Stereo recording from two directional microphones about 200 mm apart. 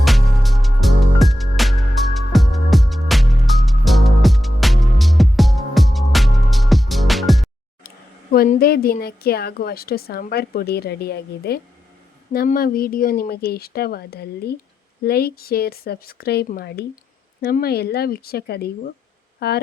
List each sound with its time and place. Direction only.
0.0 s music: centre (ahead or behind)
7.9 s speech: 45° left (ahead or behind)